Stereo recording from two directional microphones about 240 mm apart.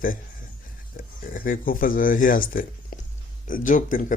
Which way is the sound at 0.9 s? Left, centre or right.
Left.